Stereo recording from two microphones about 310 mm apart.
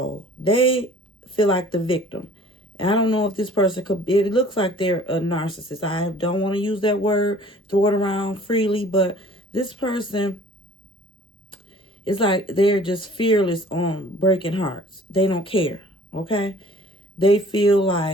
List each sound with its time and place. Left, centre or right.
0.0 s speech: centre
11.5 s a woman's voice: centre